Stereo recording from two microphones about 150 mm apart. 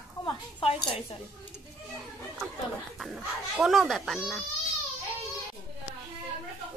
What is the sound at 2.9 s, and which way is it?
Speech, centre (ahead or behind).